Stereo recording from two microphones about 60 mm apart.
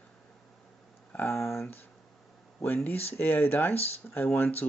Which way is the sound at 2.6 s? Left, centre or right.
Left.